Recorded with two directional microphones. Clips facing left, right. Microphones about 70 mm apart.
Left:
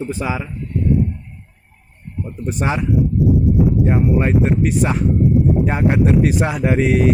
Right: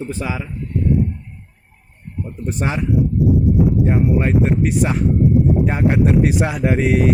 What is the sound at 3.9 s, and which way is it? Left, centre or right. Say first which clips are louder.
Speech: left 1 dB; centre.